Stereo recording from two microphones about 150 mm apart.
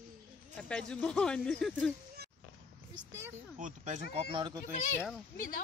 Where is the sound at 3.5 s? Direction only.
55° right (ahead or behind); by 4.6 s 30° right (ahead or behind).